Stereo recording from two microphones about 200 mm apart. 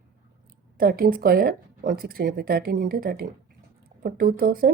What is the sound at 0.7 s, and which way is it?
Speech, 45° right (ahead or behind).